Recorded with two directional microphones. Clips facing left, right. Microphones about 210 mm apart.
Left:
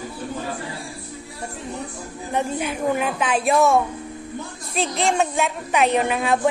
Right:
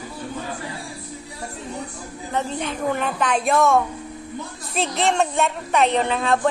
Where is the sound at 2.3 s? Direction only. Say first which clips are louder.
Left 2 dB; 10° left (ahead or behind).